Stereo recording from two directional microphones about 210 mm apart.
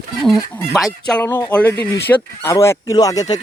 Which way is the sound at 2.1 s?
10° left (ahead or behind).